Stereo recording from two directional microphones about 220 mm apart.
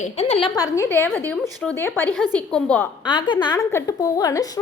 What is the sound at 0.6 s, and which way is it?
A woman's voice, 10° left (ahead or behind).